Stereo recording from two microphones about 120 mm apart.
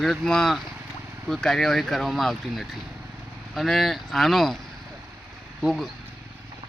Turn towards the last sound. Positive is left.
turn(degrees=0)  # may be behind; listen again after turning